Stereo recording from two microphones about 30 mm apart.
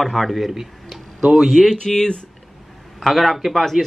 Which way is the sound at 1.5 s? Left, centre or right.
Centre.